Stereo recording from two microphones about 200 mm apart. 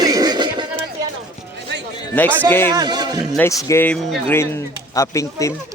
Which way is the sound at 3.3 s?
10° left (ahead or behind).